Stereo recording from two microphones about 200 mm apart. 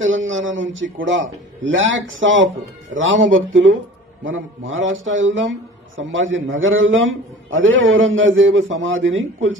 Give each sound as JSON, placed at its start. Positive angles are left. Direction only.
{"t": 0.0, "sound": "speech", "side_deg": -75}